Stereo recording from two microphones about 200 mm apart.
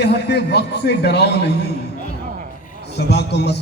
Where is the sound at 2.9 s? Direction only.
55° left (ahead or behind).